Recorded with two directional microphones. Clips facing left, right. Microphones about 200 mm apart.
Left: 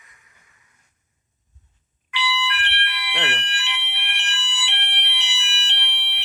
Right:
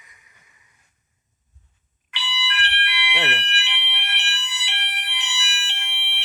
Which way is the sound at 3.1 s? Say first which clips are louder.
Right 1 dB; 5° right (ahead or behind).